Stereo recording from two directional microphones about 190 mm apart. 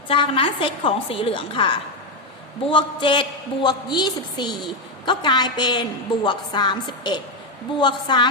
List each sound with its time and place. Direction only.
0.1 s a woman's voice: 25° left (ahead or behind)